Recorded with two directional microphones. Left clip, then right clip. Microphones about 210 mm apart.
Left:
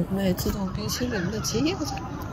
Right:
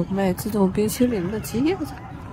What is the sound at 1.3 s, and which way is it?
Speech, 5° left (ahead or behind).